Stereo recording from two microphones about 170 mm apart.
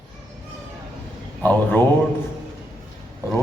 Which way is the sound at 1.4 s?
10° left (ahead or behind).